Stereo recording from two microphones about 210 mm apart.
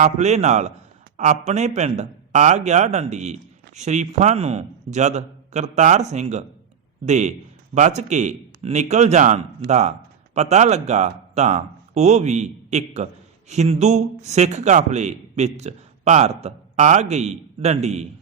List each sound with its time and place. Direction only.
0.0 s a man's voice: 35° right (ahead or behind)